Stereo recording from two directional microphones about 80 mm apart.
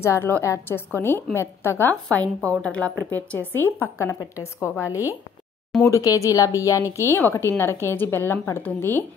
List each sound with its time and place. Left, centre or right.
0.0 s a woman's voice: left
2.0 s a woman's voice: centre